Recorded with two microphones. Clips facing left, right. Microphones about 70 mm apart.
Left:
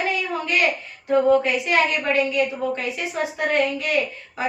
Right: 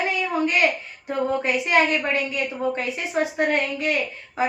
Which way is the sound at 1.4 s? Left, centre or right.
Right.